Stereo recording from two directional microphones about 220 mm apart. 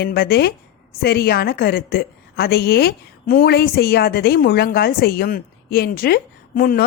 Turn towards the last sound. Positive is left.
turn(degrees=40)  # may be behind; listen again after turning